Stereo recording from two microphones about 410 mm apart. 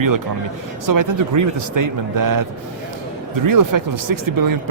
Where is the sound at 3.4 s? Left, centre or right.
Right.